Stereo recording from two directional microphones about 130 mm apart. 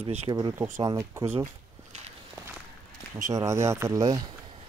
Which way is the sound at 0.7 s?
25° right (ahead or behind).